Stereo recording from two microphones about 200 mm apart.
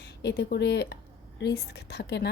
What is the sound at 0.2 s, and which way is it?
A woman's voice, 55° left (ahead or behind).